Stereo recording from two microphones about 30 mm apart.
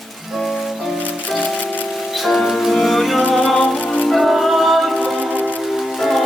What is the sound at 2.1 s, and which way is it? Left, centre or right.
Music, centre.